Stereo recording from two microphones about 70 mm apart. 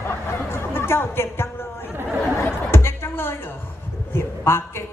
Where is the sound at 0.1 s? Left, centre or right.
Left.